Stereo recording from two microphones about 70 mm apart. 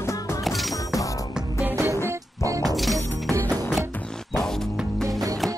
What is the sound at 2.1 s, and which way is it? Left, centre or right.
Music, right.